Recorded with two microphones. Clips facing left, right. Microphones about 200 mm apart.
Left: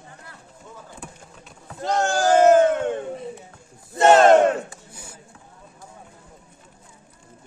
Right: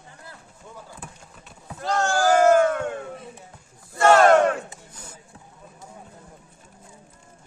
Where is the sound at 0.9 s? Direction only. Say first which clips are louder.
Left 2 dB; centre (ahead or behind).